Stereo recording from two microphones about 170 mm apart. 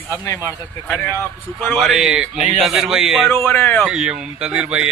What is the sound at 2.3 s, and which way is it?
Speech, 40° left (ahead or behind).